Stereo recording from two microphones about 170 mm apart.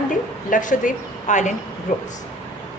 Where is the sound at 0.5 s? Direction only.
50° left (ahead or behind).